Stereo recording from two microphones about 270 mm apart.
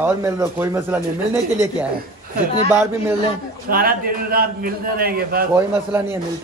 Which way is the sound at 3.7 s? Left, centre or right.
Right.